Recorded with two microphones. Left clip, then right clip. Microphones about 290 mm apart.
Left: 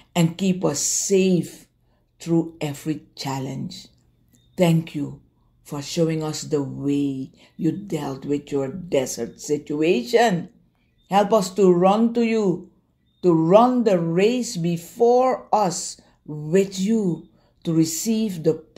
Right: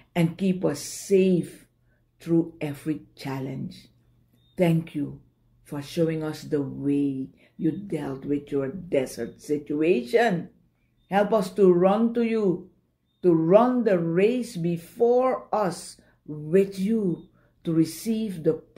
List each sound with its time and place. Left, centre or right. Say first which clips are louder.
0.0 s speech: left 3 dB; left